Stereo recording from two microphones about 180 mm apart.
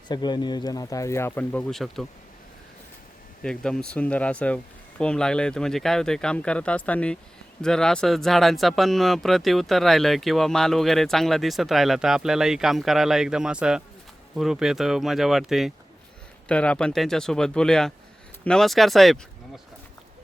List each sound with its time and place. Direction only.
0.1 s speech: 25° left (ahead or behind); by 2.0 s centre (ahead or behind)
3.4 s speech: 5° left (ahead or behind)